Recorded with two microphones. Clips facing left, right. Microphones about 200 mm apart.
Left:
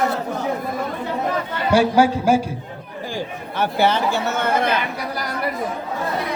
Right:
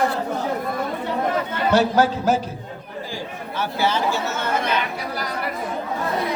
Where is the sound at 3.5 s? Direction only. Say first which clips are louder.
Left 4 dB; 60° left (ahead or behind).